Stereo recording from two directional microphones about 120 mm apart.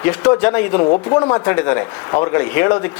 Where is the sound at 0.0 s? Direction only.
15° left (ahead or behind).